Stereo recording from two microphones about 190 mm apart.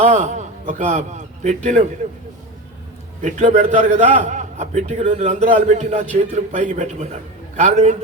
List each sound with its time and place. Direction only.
0.0 s a man's voice: 40° right (ahead or behind)
3.2 s a man's voice: 40° right (ahead or behind)